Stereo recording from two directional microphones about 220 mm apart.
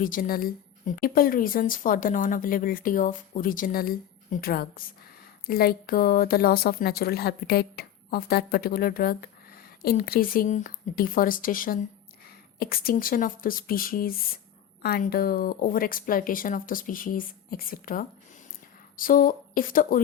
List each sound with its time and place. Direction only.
0.0 s a woman's voice: 40° left (ahead or behind)